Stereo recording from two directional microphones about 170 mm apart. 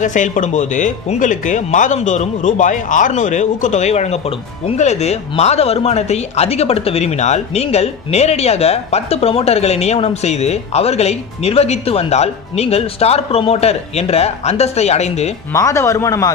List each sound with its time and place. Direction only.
0.0 s speech: 45° left (ahead or behind)
15.5 s a man's voice: 15° left (ahead or behind)